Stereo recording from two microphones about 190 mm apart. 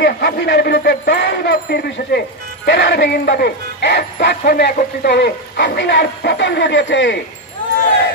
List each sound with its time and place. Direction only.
0.0 s speech: 60° left (ahead or behind)